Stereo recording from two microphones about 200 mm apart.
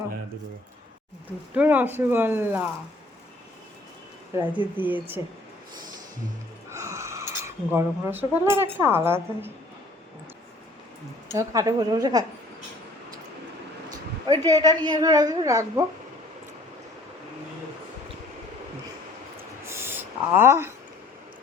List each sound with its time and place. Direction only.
1.5 s speech: 10° right (ahead or behind)
4.4 s speech: 10° right (ahead or behind)
6.7 s music: 15° right (ahead or behind)
7.7 s speech: 10° right (ahead or behind)
11.3 s a woman's voice: 15° right (ahead or behind)
13.9 s a sound: 20° right (ahead or behind)
14.6 s a woman's voice: 20° right (ahead or behind)
19.6 s owl: 10° right (ahead or behind)